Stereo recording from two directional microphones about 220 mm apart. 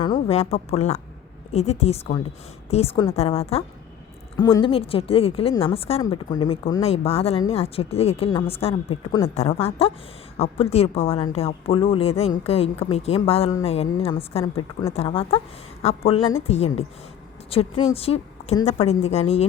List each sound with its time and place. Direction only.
0.0 s a woman's voice: 25° left (ahead or behind)
6.8 s a woman's voice: 25° left (ahead or behind)